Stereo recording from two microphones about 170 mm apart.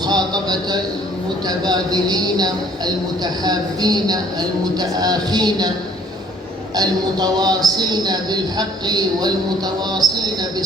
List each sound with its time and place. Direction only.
0.0 s a man's voice: 25° right (ahead or behind)
6.7 s speech: 25° right (ahead or behind)